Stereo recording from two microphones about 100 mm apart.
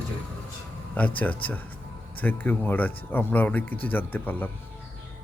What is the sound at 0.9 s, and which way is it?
Speech, 15° left (ahead or behind).